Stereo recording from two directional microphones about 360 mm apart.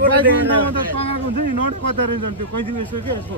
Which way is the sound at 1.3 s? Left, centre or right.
Right.